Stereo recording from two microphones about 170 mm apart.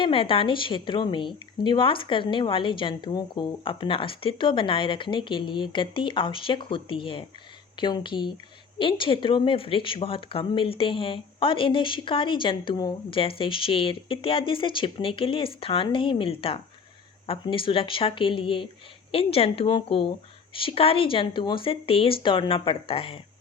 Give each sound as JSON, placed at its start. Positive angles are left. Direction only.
{"t": 0.0, "sound": "a woman's voice", "side_deg": 30}